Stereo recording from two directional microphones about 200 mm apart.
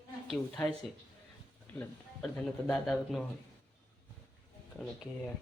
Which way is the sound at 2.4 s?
5° left (ahead or behind).